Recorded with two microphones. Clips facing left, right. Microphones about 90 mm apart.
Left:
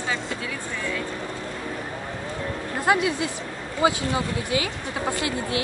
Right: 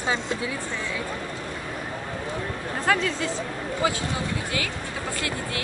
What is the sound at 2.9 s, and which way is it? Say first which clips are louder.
Speech: left 2 dB; 15° left (ahead or behind).